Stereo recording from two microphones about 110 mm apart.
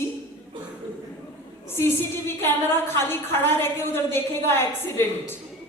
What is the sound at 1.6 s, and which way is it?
Speech, 20° left (ahead or behind).